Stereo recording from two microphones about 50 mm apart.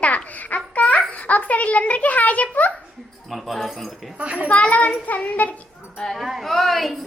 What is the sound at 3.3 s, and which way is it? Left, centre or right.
Speech, centre.